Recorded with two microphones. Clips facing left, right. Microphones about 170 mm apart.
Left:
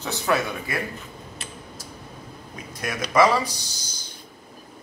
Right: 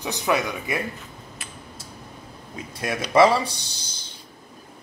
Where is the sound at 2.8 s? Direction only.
30° right (ahead or behind).